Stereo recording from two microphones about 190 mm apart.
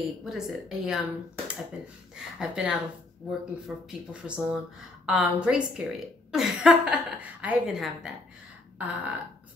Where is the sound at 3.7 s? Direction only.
5° right (ahead or behind).